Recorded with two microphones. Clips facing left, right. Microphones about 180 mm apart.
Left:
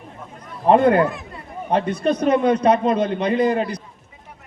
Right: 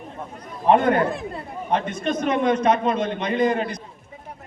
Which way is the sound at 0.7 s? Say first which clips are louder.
Left 3 dB; 30° left (ahead or behind).